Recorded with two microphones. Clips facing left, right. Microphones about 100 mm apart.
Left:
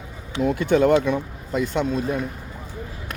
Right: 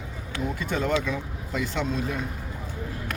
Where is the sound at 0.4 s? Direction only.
70° left (ahead or behind).